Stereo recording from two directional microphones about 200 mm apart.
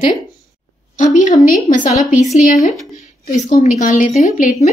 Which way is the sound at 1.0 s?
40° left (ahead or behind).